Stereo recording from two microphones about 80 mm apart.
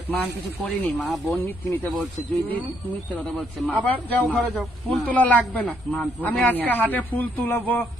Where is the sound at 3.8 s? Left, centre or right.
Centre.